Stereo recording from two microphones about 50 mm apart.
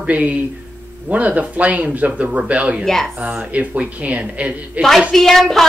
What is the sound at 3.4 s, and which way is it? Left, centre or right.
Speech, right.